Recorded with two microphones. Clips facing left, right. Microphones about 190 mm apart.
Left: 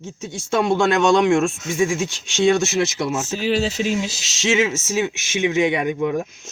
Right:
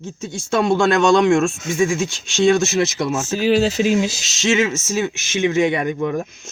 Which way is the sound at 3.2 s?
Centre (ahead or behind).